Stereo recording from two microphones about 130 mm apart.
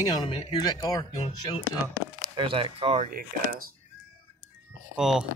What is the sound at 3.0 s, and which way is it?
Speech, 90° right.